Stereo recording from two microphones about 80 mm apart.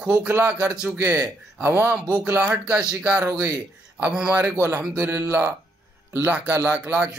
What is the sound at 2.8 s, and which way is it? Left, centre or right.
Speech, centre.